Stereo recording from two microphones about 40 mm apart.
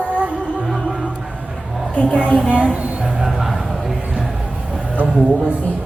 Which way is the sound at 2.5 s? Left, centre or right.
Right.